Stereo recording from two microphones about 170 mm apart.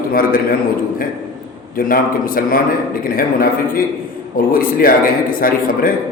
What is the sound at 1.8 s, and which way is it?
A man's voice, 55° left (ahead or behind).